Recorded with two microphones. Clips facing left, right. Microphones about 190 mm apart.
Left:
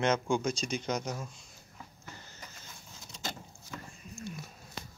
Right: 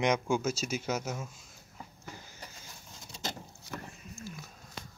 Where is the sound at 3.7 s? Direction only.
55° right (ahead or behind).